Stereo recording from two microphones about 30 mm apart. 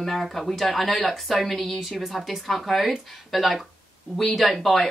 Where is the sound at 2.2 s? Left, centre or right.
Centre.